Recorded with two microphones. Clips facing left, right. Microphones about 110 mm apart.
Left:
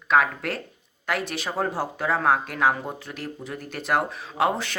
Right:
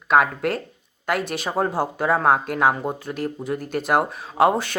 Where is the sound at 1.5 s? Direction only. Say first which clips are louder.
Right 4 dB; 25° right (ahead or behind).